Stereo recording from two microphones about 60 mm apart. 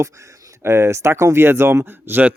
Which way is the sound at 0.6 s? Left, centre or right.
Right.